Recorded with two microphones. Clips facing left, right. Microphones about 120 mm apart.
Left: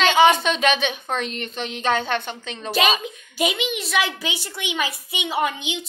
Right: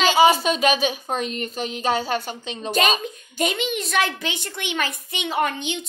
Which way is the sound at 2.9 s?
40° right (ahead or behind).